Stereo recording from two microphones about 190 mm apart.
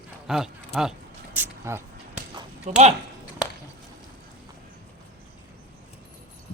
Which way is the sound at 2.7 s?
35° right (ahead or behind).